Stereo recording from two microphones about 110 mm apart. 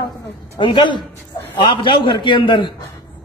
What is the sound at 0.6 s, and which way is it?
A man's voice, 45° left (ahead or behind).